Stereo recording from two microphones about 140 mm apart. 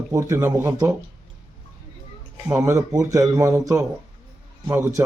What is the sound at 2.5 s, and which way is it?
Speech, 20° right (ahead or behind).